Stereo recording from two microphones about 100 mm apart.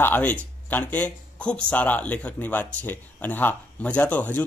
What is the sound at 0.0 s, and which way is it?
Speech, 15° left (ahead or behind).